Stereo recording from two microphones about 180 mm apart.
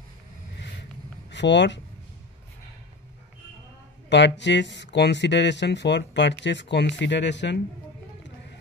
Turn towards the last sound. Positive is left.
turn(degrees=80)